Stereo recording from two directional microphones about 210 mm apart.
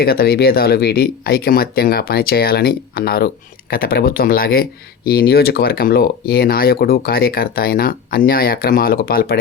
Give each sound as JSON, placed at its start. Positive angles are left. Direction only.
{"t": 0.0, "sound": "speech", "side_deg": 45}